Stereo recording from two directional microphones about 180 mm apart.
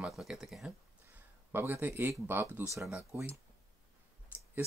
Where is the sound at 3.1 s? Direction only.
15° right (ahead or behind).